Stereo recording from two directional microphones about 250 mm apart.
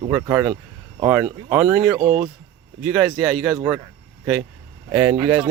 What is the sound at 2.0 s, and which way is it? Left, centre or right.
Speech, centre.